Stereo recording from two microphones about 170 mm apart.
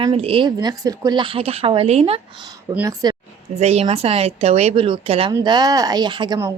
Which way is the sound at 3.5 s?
40° right (ahead or behind).